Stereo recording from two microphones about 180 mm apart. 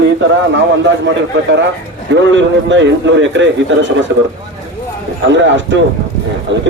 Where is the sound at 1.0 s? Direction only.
85° right.